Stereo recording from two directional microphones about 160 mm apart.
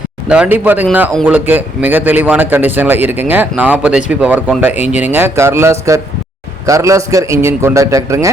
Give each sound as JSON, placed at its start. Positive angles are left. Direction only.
{"t": 0.3, "sound": "a man's voice", "side_deg": -10}